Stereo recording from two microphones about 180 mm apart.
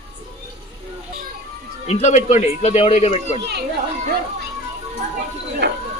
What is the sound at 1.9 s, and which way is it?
A man's voice, 40° left (ahead or behind).